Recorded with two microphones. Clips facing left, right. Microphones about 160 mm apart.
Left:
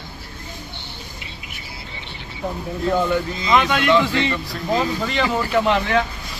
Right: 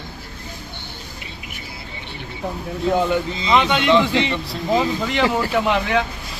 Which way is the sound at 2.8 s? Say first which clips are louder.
Right 1 dB; 15° right (ahead or behind).